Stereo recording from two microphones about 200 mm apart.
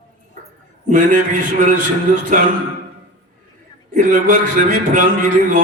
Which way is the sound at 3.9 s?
40° right (ahead or behind).